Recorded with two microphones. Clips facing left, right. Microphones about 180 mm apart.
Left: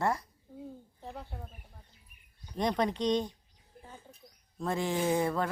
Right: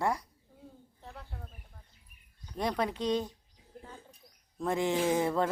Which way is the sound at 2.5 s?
5° right (ahead or behind).